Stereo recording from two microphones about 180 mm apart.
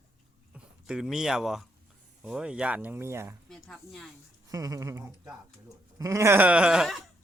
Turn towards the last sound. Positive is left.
turn(degrees=-5)  # may be behind; listen again after turning